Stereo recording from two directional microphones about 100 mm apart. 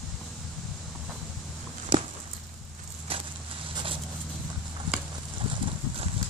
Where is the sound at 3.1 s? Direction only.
70° right (ahead or behind).